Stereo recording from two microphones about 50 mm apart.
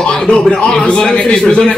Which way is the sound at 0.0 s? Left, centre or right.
Centre.